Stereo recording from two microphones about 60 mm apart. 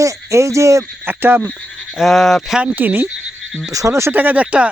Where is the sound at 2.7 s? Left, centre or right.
Right.